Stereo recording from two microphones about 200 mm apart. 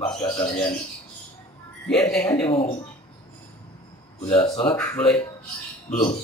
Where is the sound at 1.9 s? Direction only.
5° left (ahead or behind).